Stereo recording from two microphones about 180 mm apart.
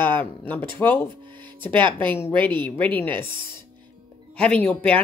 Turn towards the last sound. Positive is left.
turn(degrees=10)  # may be behind; listen again after turning